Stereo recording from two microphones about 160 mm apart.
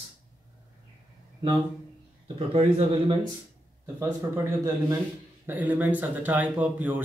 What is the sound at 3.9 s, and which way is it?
Speech, 20° right (ahead or behind).